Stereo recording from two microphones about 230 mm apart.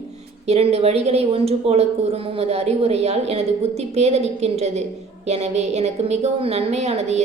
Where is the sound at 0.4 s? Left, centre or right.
Right.